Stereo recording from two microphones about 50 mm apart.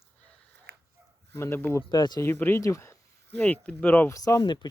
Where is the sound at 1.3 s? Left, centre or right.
Left.